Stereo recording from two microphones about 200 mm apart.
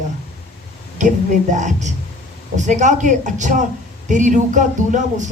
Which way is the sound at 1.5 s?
40° right (ahead or behind).